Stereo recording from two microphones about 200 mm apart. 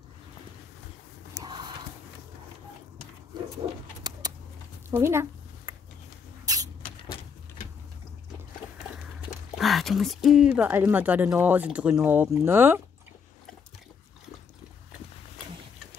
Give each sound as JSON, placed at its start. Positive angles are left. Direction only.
{"t": 1.4, "sound": "horse", "side_deg": -20}
{"t": 4.1, "sound": "a sound", "side_deg": -20}
{"t": 6.4, "sound": "rodents", "side_deg": -20}
{"t": 9.6, "sound": "speech", "side_deg": 0}